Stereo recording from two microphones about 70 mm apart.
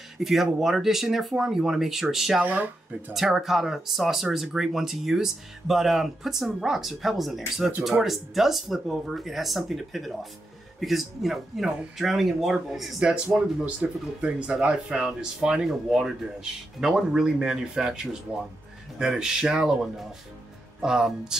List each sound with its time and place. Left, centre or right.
0.2 s speech: centre
2.4 s speech: right
3.1 s speech: centre
13.3 s speech: centre